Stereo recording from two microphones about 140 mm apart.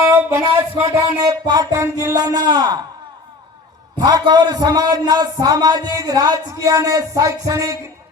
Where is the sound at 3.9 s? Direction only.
30° right (ahead or behind).